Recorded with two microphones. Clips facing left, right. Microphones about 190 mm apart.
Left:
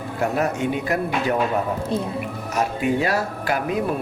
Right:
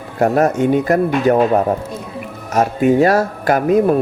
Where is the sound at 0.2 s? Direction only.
45° right (ahead or behind).